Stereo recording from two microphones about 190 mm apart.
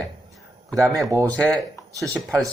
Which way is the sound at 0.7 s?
15° right (ahead or behind).